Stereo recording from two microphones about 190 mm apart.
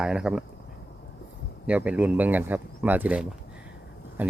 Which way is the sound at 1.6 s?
5° right (ahead or behind).